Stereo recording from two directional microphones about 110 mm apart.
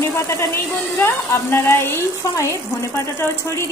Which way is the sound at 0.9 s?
20° left (ahead or behind).